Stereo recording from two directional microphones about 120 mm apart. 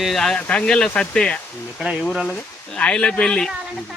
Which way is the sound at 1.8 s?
5° right (ahead or behind).